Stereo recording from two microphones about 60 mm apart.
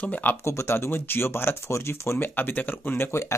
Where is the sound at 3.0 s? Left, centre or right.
Left.